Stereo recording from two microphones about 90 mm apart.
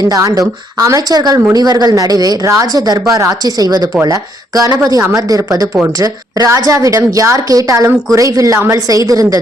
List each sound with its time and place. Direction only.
0.0 s a woman's voice: 45° right (ahead or behind)
8.5 s a woman's voice: 25° right (ahead or behind)
8.9 s a woman's voice: 40° right (ahead or behind)